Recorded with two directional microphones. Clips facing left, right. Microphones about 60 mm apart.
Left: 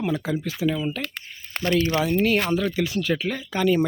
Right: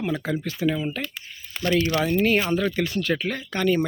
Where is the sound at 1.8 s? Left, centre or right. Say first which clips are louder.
Left 1 dB; left.